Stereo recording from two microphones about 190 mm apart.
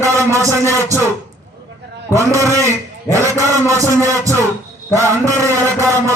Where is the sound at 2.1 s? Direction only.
15° right (ahead or behind).